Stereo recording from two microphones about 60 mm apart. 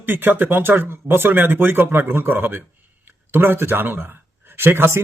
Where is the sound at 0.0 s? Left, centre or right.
Right.